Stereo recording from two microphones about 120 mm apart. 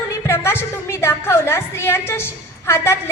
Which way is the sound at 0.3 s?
20° left (ahead or behind).